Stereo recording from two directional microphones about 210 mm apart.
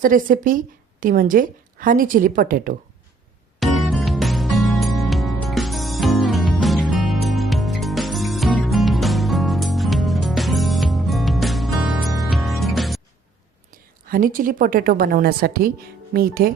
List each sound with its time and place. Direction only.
0.0 s a woman's voice: 40° right (ahead or behind)
3.6 s music: centre (ahead or behind)
14.1 s a woman's voice: 40° right (ahead or behind)